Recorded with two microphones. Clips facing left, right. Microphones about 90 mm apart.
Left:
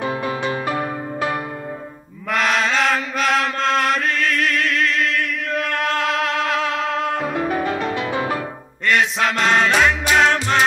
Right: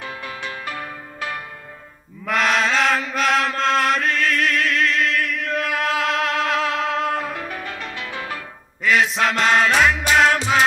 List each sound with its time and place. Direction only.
0.0 s music: 25° left (ahead or behind)
2.2 s chant: centre (ahead or behind)
7.3 s music: 25° left (ahead or behind)
8.8 s music: centre (ahead or behind)